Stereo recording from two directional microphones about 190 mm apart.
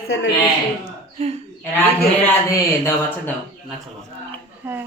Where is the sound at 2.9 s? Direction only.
10° left (ahead or behind).